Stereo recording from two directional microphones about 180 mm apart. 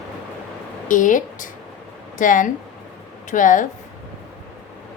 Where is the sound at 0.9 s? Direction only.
45° left (ahead or behind).